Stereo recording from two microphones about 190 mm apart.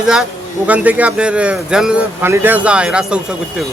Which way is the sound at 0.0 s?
5° right (ahead or behind).